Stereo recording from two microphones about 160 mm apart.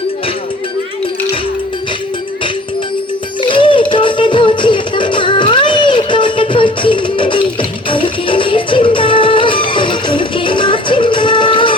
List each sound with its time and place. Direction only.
3.5 s music: 30° left (ahead or behind)